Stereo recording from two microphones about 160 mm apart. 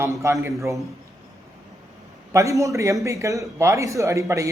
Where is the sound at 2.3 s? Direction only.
20° right (ahead or behind).